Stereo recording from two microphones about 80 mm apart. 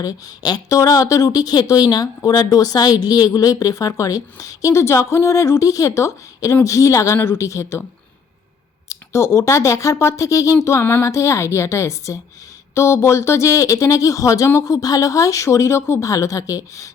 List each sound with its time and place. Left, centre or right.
0.0 s speech: left
0.8 s speech: left
8.9 s speech: left